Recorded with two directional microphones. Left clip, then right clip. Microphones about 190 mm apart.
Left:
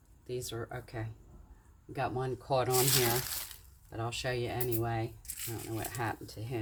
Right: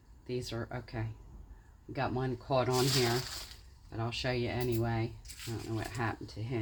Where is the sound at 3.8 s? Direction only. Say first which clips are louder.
Even; 35° right (ahead or behind).